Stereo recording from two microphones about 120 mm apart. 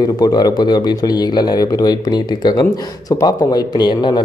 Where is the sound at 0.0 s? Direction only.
35° left (ahead or behind).